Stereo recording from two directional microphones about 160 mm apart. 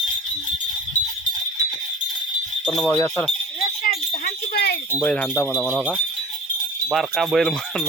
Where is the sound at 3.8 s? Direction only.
80° left.